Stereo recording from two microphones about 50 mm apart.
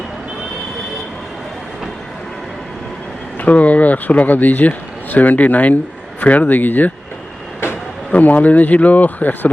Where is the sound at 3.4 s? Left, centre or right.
Left.